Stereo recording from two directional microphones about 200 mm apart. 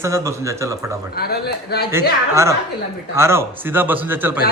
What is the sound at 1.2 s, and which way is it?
Speech, 50° left (ahead or behind).